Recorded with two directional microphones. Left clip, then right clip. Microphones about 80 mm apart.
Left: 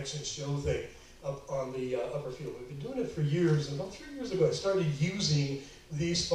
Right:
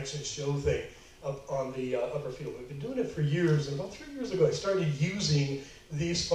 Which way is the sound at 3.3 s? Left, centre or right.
Right.